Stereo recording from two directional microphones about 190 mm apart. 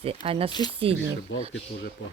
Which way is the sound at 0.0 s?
30° right (ahead or behind).